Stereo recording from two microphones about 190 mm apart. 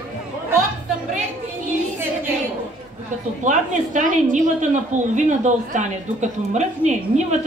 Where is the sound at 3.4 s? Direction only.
40° right (ahead or behind).